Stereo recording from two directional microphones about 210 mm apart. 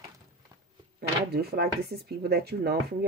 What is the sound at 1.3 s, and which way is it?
Speech, 50° right (ahead or behind).